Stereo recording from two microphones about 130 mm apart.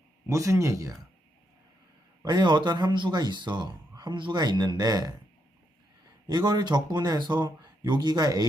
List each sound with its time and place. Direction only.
0.3 s speech: 25° right (ahead or behind)
2.2 s speech: 35° right (ahead or behind)
6.2 s speech: 35° right (ahead or behind)